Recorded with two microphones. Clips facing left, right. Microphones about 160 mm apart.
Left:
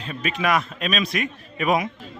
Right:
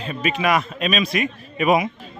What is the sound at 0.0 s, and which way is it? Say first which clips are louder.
Speech: right 3 dB; 5° right (ahead or behind).